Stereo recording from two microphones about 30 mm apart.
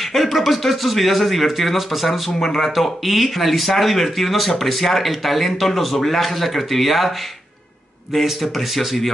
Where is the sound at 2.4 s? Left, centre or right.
Centre.